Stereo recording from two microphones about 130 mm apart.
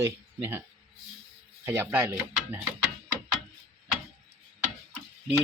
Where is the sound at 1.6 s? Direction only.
15° right (ahead or behind).